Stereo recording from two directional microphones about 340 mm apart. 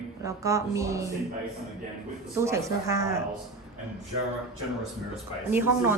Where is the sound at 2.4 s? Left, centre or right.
Centre.